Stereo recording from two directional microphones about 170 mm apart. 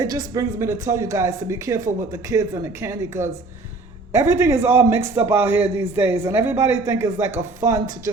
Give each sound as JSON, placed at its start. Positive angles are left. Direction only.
{"t": 0.0, "sound": "a man's voice", "side_deg": -20}